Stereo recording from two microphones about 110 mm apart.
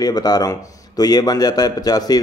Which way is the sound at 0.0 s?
35° left (ahead or behind).